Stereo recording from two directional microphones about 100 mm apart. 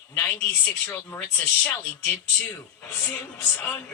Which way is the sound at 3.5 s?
20° left (ahead or behind).